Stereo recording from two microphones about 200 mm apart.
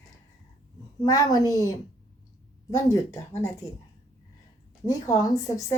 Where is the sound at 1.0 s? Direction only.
20° left (ahead or behind).